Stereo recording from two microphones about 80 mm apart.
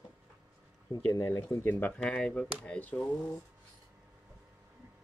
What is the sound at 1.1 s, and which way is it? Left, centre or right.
Speech, left.